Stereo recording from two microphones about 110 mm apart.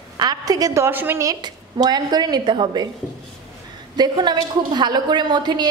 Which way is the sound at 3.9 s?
40° right (ahead or behind).